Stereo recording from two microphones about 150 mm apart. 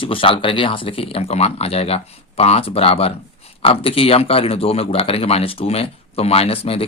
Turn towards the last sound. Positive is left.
turn(degrees=40)  # may be behind; listen again after turning